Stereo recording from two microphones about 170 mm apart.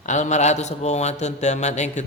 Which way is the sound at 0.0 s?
45° left (ahead or behind).